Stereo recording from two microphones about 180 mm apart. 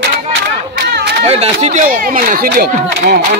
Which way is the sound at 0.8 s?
65° right (ahead or behind).